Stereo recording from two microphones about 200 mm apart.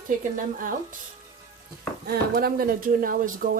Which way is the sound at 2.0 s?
50° right (ahead or behind).